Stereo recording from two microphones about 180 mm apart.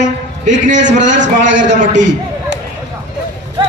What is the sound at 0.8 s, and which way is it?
Speech, 45° right (ahead or behind).